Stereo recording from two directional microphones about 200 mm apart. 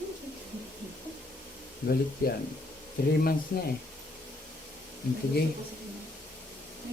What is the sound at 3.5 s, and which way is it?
Speech, 50° left (ahead or behind).